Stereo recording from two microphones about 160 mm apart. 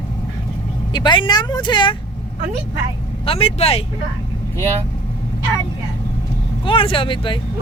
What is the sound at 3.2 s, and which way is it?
Speech, 35° left (ahead or behind).